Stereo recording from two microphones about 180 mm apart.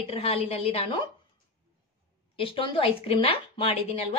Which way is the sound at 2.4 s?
30° left (ahead or behind).